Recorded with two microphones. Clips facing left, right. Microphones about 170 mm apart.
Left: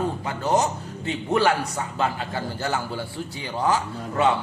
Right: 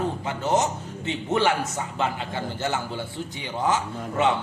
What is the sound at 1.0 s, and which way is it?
Speech, 20° right (ahead or behind).